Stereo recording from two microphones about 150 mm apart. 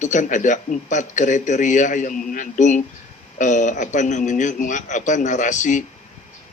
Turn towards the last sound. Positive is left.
turn(degrees=55)  # may be behind; listen again after turning